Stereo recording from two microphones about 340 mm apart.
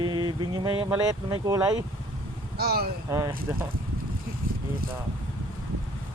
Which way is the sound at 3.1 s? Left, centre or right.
Centre.